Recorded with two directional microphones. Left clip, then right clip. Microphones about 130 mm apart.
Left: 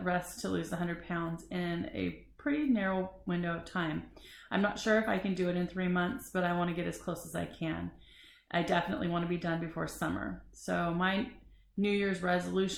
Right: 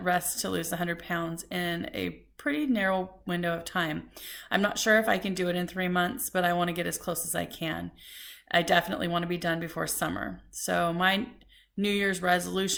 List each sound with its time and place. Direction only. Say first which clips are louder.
0.0 s a woman's voice: right 6 dB; 20° right (ahead or behind)